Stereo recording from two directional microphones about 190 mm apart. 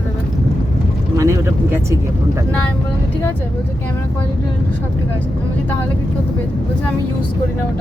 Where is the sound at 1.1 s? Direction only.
15° right (ahead or behind).